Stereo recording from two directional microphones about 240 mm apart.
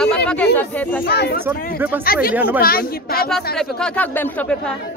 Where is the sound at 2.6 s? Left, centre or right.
Left.